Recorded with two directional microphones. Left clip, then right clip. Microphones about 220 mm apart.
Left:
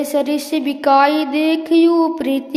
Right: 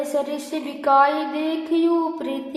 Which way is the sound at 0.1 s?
40° left (ahead or behind).